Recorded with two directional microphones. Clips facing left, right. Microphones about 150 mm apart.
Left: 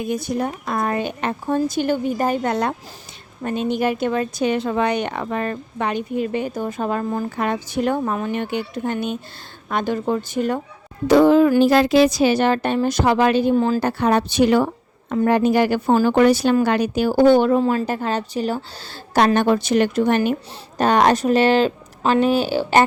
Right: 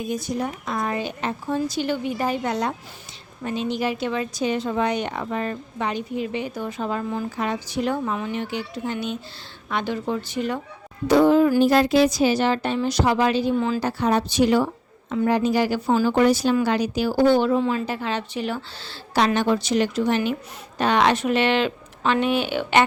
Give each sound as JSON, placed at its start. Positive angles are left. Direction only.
{"t": 0.0, "sound": "a woman's voice", "side_deg": 60}
{"t": 11.1, "sound": "speech", "side_deg": 90}
{"t": 13.6, "sound": "speech", "side_deg": 40}
{"t": 13.8, "sound": "a woman's voice", "side_deg": 60}
{"t": 19.1, "sound": "a woman's voice", "side_deg": 50}